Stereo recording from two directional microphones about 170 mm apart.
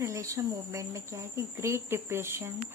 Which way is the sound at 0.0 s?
15° right (ahead or behind).